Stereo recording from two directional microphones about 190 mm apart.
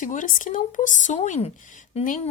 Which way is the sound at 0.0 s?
45° left (ahead or behind).